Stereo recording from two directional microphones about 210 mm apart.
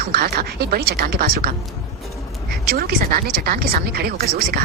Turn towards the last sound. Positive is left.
turn(degrees=-45)  # may be behind; listen again after turning